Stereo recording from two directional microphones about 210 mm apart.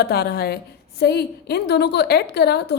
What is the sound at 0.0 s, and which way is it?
A woman's voice, 50° left (ahead or behind).